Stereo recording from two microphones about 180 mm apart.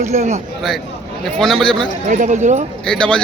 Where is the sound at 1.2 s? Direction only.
Centre (ahead or behind).